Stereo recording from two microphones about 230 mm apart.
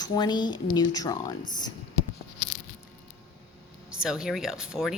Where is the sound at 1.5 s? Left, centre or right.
Centre.